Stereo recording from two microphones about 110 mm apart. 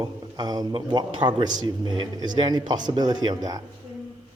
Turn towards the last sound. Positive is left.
turn(degrees=-40)  # may be behind; listen again after turning